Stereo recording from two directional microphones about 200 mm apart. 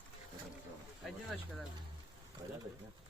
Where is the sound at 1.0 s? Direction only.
Centre (ahead or behind).